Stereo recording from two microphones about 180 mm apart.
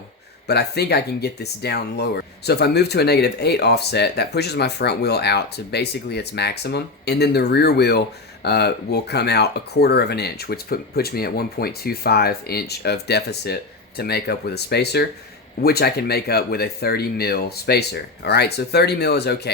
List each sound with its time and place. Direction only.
0.4 s speech: 65° left (ahead or behind)